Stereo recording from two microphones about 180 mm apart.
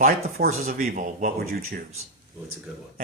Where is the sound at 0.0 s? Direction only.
50° right (ahead or behind).